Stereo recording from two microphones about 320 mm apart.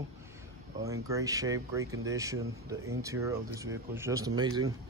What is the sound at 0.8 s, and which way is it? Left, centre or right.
Speech, centre.